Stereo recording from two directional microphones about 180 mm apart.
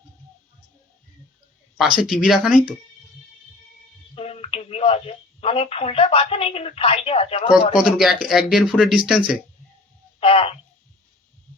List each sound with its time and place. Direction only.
1.8 s speech: centre (ahead or behind)
4.1 s speech: 35° left (ahead or behind)
7.8 s speech: 5° right (ahead or behind)
10.2 s speech: 30° left (ahead or behind)